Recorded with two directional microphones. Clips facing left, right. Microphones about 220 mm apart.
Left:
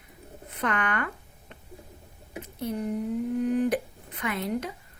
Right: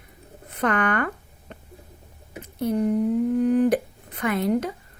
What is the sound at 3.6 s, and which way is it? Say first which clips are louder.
Speech: right 5 dB; 45° right (ahead or behind).